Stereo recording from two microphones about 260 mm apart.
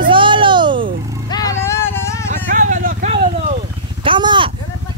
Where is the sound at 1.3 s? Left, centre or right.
Centre.